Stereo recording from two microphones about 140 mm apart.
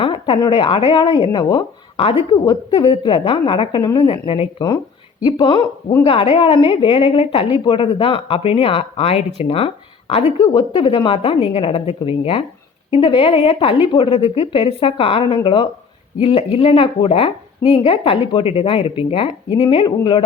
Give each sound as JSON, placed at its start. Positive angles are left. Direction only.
{"t": 0.0, "sound": "a sound", "side_deg": 40}
{"t": 0.3, "sound": "a woman's voice", "side_deg": 30}
{"t": 10.5, "sound": "a woman's voice", "side_deg": 30}